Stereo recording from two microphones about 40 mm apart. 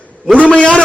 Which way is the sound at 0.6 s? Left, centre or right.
Left.